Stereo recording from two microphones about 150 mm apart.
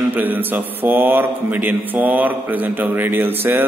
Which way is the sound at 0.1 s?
10° right (ahead or behind).